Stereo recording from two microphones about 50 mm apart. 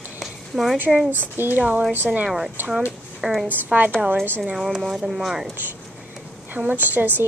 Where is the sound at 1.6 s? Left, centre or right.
Right.